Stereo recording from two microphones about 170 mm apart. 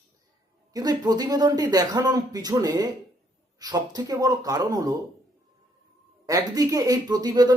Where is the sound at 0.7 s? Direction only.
20° right (ahead or behind).